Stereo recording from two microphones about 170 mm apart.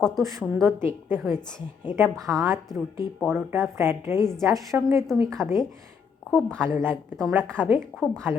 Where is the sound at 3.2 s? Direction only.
15° right (ahead or behind).